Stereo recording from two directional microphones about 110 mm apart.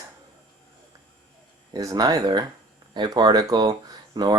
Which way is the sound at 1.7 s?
35° right (ahead or behind).